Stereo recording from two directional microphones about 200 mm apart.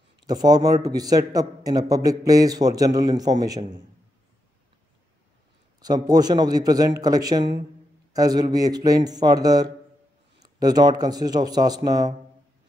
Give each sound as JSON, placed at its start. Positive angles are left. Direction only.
{"t": 0.3, "sound": "a man's voice", "side_deg": -20}
{"t": 5.8, "sound": "a man's voice", "side_deg": -20}